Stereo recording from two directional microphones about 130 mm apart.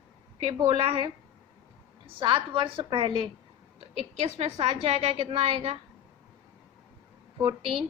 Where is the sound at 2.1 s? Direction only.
40° right (ahead or behind).